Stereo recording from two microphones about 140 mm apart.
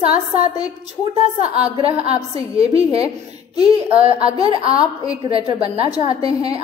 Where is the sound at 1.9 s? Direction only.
45° right (ahead or behind).